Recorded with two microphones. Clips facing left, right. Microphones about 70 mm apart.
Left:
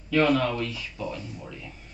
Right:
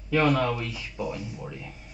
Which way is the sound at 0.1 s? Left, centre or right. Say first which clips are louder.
Left 1 dB; centre.